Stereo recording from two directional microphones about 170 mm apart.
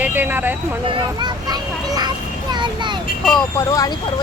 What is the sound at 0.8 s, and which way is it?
Speech, 30° right (ahead or behind).